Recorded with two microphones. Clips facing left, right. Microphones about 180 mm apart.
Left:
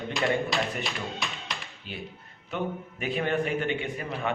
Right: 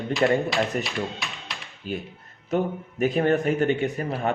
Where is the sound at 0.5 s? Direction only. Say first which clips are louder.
Right 5 dB; centre (ahead or behind).